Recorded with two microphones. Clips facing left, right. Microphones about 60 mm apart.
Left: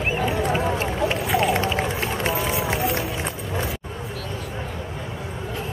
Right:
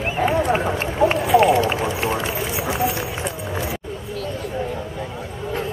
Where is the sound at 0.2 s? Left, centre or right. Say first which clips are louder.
Right 8 dB; right.